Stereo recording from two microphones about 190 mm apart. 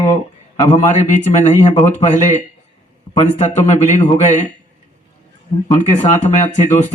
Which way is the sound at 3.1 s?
35° left (ahead or behind).